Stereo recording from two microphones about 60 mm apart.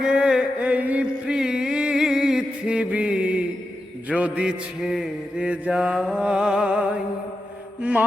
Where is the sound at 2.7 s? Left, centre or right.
Right.